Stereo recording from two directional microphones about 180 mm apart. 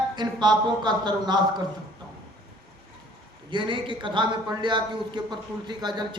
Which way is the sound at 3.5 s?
25° right (ahead or behind).